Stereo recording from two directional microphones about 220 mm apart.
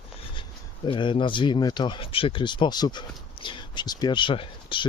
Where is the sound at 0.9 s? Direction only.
20° left (ahead or behind).